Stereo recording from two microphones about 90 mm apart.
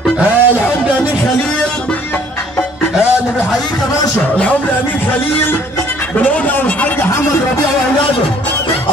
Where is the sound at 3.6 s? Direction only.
45° left (ahead or behind).